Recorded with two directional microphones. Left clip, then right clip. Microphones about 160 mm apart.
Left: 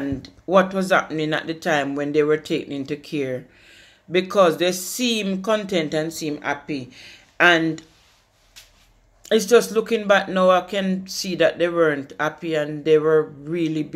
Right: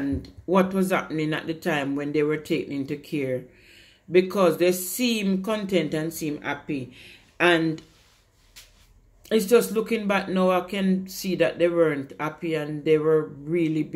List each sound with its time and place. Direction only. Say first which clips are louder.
0.2 s speech: left 6 dB; 5° right (ahead or behind)
9.2 s speech: left 4 dB; 5° right (ahead or behind)